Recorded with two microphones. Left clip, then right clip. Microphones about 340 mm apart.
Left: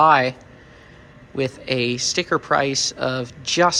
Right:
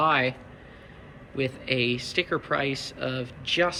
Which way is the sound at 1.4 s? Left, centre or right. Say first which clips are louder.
Left 4 dB; centre.